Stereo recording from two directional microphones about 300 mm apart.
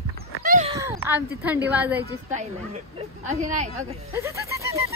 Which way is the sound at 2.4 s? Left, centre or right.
Right.